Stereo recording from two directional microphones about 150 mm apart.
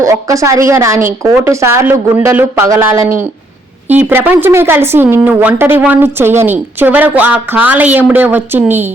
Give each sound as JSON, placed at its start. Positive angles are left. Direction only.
{"t": 0.0, "sound": "a woman's voice", "side_deg": -20}